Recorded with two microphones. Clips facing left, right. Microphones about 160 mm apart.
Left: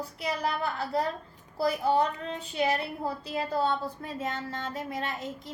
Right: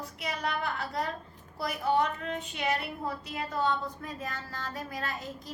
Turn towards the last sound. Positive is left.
turn(degrees=25)  # may be behind; listen again after turning